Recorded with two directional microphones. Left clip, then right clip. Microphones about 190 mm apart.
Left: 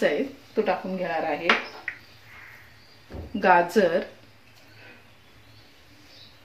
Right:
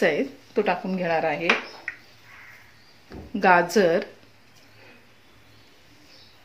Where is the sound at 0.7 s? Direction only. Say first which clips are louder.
Right 2 dB; 50° right (ahead or behind).